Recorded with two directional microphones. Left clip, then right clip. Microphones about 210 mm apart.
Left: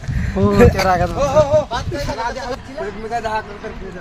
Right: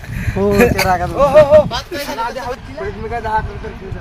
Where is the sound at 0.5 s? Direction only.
Centre (ahead or behind).